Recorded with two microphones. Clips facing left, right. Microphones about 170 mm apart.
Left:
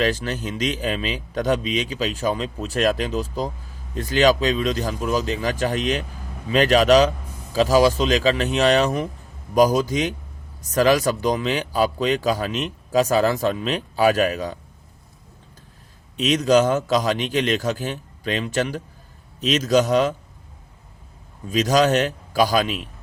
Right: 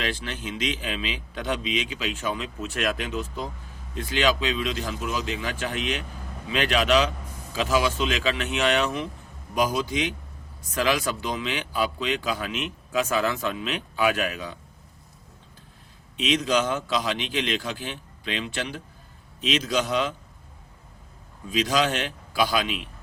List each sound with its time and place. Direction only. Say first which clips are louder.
0.0 s speech: left 8 dB; 40° left (ahead or behind)
16.1 s a man's voice: left 7 dB; 40° left (ahead or behind)
21.4 s speech: left 6 dB; 45° left (ahead or behind)